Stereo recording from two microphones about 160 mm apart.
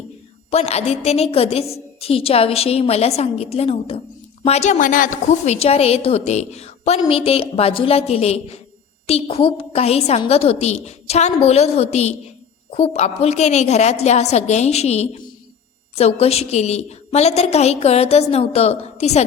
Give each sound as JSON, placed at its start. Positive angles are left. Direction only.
{"t": 0.5, "sound": "a woman's voice", "side_deg": 40}